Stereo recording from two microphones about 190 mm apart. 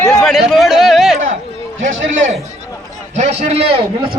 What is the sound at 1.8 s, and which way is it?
A man's voice, 40° right (ahead or behind).